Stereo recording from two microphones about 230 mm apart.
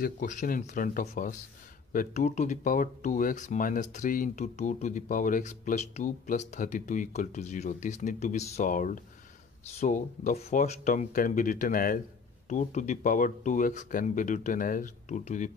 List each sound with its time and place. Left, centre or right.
0.0 s speech: left